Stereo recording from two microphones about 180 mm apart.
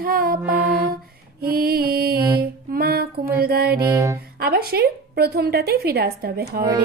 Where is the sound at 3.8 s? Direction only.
15° right (ahead or behind).